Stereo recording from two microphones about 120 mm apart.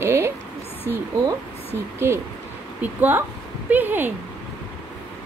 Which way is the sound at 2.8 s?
15° right (ahead or behind).